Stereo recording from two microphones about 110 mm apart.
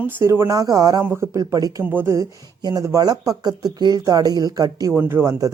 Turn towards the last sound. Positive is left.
turn(degrees=-30)  # may be behind; listen again after turning